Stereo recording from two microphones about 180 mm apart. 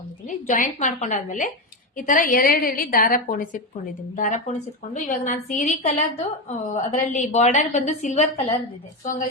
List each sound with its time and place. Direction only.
0.3 s a woman's voice: 45° left (ahead or behind)